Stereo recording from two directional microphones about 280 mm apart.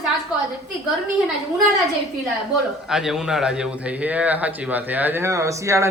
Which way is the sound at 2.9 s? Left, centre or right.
Centre.